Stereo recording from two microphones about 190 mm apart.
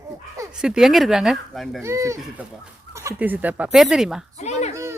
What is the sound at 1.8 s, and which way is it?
Speech, 15° right (ahead or behind).